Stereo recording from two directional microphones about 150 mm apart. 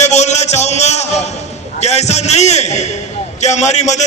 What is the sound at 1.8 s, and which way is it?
A man's voice, 50° left (ahead or behind).